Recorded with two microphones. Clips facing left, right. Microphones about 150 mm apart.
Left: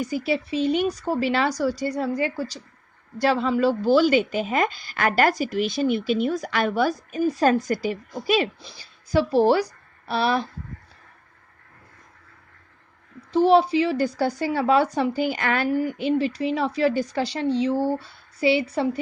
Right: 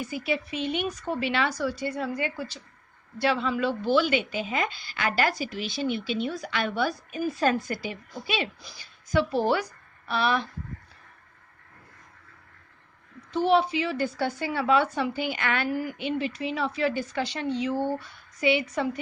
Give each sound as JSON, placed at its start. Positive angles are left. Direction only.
{"t": 0.0, "sound": "a woman's voice", "side_deg": 35}
{"t": 8.6, "sound": "a woman's voice", "side_deg": 30}
{"t": 13.3, "sound": "speech", "side_deg": 35}